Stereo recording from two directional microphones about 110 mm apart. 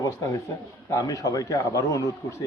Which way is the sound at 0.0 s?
30° left (ahead or behind).